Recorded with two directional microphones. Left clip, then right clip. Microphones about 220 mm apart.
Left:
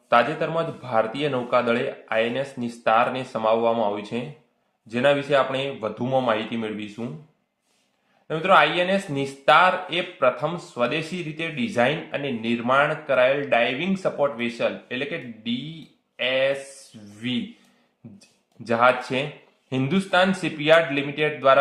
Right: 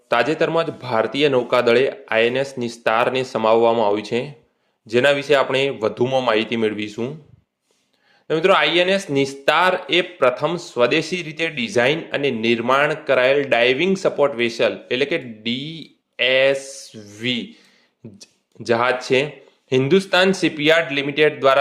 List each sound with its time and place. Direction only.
0.1 s speech: 35° right (ahead or behind)
8.3 s speech: 40° right (ahead or behind)